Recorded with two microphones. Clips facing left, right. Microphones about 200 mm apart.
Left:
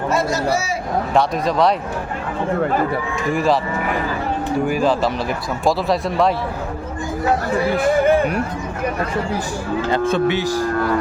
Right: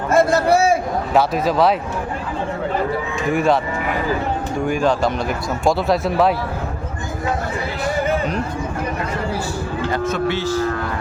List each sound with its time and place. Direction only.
0.1 s a man's voice: 55° right (ahead or behind)
1.1 s speech: 5° right (ahead or behind)
3.3 s speech: centre (ahead or behind)
4.7 s speech: 5° left (ahead or behind)
9.9 s speech: 30° left (ahead or behind)
10.2 s speech: 15° left (ahead or behind)